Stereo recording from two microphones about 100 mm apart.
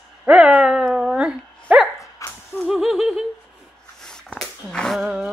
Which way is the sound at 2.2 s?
30° left (ahead or behind).